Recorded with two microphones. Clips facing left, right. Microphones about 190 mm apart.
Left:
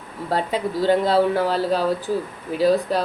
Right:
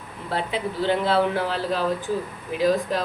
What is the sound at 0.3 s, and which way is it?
Speech, 40° left (ahead or behind).